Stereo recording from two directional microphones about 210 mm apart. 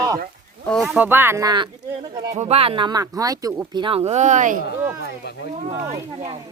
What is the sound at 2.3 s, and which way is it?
Speech, 30° right (ahead or behind).